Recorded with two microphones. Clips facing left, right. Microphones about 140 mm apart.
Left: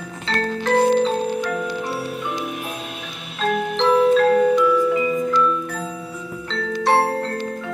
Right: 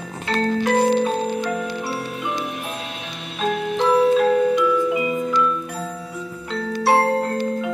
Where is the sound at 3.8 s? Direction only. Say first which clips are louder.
Left 1 dB; 5° right (ahead or behind).